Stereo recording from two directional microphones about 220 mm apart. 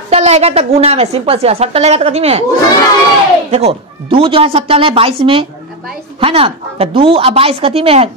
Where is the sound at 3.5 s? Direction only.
25° right (ahead or behind).